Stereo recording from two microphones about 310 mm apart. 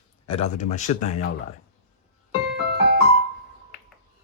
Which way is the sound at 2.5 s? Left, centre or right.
Right.